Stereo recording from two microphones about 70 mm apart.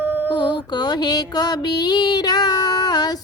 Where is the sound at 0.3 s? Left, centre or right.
Left.